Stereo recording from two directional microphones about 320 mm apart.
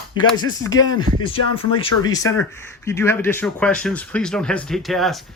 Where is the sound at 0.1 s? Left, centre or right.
Centre.